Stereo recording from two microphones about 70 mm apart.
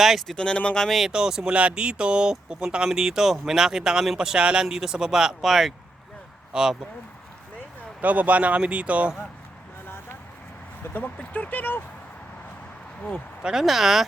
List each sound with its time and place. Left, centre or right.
0.0 s speech: centre
0.3 s speech: centre
0.9 s speech: centre
8.0 s speech: right
9.8 s vehicle: left
10.8 s speech: left
13.4 s speech: centre